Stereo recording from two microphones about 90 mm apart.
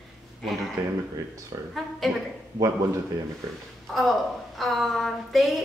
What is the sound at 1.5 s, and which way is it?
Speech, 55° right (ahead or behind).